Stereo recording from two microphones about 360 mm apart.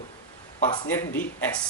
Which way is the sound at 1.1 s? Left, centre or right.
Centre.